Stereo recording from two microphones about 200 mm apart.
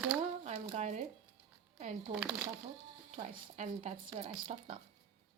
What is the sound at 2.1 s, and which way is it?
Speech, 5° right (ahead or behind).